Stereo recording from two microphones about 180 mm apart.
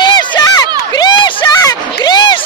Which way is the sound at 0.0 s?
20° left (ahead or behind).